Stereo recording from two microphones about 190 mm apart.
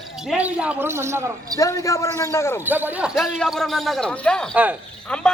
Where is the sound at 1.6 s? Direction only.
15° left (ahead or behind).